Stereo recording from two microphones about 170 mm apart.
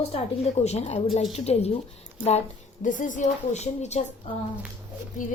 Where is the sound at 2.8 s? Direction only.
50° left (ahead or behind).